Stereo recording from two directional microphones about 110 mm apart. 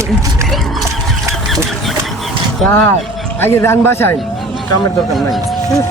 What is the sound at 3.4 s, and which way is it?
Speech, 20° left (ahead or behind).